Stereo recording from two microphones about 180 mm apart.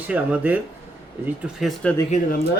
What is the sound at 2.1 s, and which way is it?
Speech, 55° left (ahead or behind).